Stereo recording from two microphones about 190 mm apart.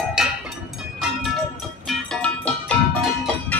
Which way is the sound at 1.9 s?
5° left (ahead or behind).